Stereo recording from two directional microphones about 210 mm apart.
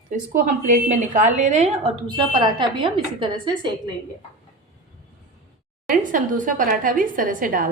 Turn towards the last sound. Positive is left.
turn(degrees=-40)  # may be behind; listen again after turning